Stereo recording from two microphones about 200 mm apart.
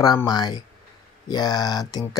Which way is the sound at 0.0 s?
20° left (ahead or behind).